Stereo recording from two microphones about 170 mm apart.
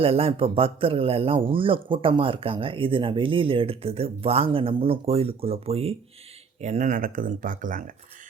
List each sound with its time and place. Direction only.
0.0 s speech: 35° right (ahead or behind); by 7.9 s 50° right (ahead or behind)